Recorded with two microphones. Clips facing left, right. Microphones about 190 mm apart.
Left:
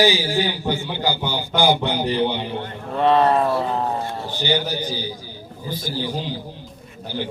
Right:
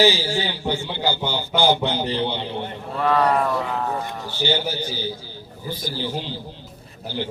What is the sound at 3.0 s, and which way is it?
Speech, 25° left (ahead or behind).